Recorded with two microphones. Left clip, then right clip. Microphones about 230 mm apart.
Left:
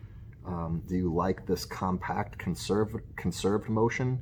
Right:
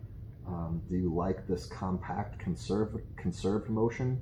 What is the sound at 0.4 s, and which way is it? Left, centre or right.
Speech, left.